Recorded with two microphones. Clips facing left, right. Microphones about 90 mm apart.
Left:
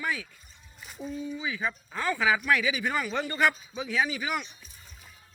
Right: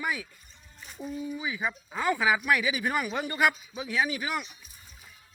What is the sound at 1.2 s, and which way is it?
Speech, 10° right (ahead or behind).